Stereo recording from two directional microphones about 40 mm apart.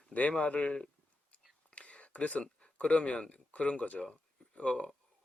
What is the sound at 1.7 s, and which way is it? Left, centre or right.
Whispering, left.